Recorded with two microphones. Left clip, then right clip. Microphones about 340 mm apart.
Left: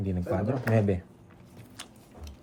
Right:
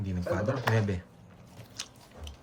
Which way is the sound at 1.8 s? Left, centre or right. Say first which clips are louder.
Right 4 dB; centre.